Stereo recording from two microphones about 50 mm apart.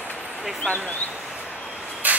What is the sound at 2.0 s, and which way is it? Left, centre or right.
Vehicle, right.